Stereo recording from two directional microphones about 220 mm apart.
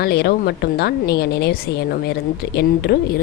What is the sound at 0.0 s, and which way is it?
A woman's voice, 45° left (ahead or behind).